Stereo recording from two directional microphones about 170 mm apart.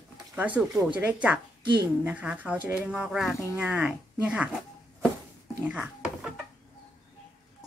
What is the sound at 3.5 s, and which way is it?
Speech, 10° right (ahead or behind).